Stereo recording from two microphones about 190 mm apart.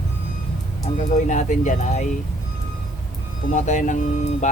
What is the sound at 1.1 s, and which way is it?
Speech, 40° left (ahead or behind).